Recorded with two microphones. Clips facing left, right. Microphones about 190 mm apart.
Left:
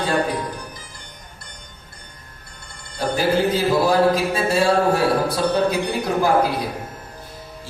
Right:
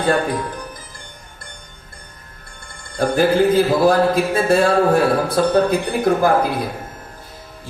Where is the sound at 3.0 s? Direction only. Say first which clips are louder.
Right 4 dB; 55° right (ahead or behind).